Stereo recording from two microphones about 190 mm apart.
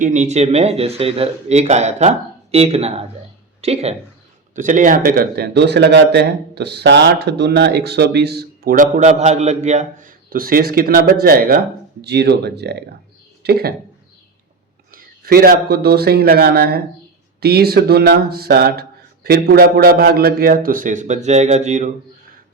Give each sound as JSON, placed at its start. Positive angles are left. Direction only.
{"t": 0.0, "sound": "speech", "side_deg": -40}
{"t": 14.9, "sound": "speech", "side_deg": -50}